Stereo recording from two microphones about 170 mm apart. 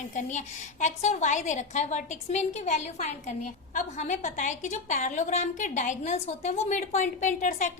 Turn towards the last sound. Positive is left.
turn(degrees=45)  # may be behind; listen again after turning